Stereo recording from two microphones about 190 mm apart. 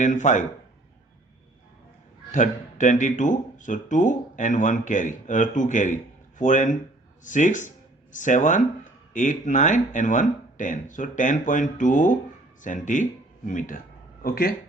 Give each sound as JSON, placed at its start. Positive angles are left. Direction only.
{"t": 0.0, "sound": "speech", "side_deg": 40}
{"t": 2.3, "sound": "speech", "side_deg": 40}